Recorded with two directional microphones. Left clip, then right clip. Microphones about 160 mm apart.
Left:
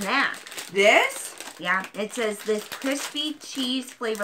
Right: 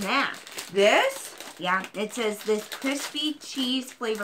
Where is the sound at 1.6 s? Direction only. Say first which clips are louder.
Left 1 dB; 15° right (ahead or behind).